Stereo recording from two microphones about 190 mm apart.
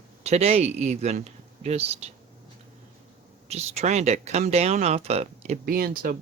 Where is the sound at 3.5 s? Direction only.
35° right (ahead or behind).